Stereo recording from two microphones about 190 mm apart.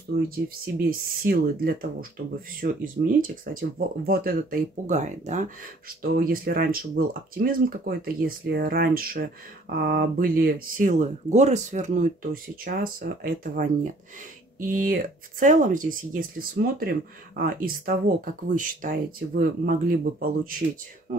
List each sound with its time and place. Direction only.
0.8 s speech: 50° right (ahead or behind)
6.0 s speech: 50° right (ahead or behind)